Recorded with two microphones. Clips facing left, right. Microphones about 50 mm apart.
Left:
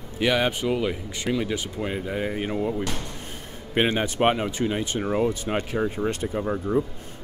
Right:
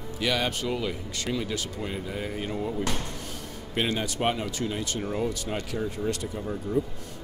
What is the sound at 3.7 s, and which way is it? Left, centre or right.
Speech, left.